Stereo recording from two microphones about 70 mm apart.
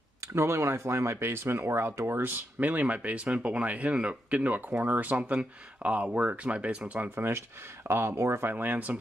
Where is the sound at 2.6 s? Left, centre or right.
Right.